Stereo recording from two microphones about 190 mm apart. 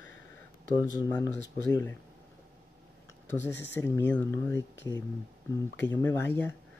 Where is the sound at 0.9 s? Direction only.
20° left (ahead or behind).